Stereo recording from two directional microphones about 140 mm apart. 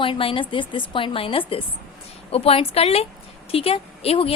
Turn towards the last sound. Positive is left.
turn(degrees=45)  # may be behind; listen again after turning